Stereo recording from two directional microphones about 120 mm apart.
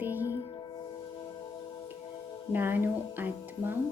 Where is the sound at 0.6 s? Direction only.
35° left (ahead or behind).